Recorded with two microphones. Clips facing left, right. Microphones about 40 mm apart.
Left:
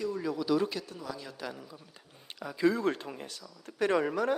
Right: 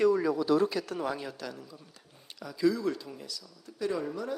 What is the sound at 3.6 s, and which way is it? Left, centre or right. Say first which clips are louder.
Speech: left 4 dB; left.